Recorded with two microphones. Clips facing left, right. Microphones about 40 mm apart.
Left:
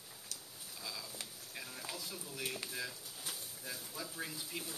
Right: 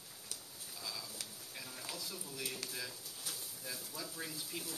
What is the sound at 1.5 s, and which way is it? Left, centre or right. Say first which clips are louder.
Speech: left 2 dB; centre.